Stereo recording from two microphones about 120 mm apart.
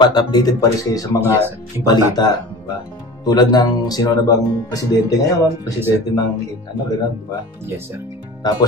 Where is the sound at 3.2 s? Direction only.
35° left (ahead or behind).